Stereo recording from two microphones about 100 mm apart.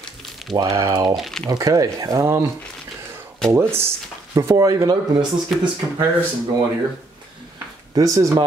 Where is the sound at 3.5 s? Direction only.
25° right (ahead or behind).